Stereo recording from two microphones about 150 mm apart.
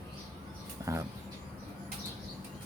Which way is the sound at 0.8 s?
20° right (ahead or behind).